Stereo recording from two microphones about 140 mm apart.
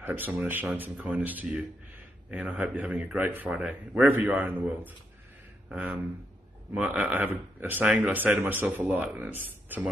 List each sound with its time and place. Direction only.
0.0 s speech: 10° right (ahead or behind)